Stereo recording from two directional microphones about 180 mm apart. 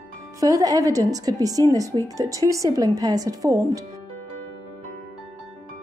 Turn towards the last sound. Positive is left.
turn(degrees=-20)  # may be behind; listen again after turning